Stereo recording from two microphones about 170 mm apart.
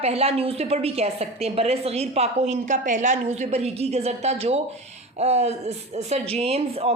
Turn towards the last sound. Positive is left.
turn(degrees=-35)  # may be behind; listen again after turning